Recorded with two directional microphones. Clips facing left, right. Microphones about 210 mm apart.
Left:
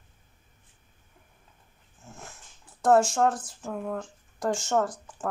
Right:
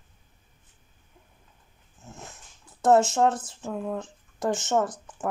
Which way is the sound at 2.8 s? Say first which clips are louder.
Right 1 dB; 20° right (ahead or behind).